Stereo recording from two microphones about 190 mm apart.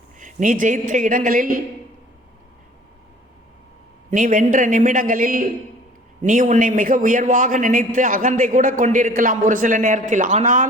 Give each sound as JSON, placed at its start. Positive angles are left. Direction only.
{"t": 0.2, "sound": "a man's voice", "side_deg": -45}
{"t": 4.1, "sound": "a man's voice", "side_deg": -45}